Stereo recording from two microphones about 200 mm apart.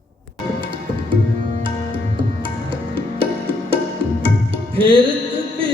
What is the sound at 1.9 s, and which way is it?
Music, 25° right (ahead or behind).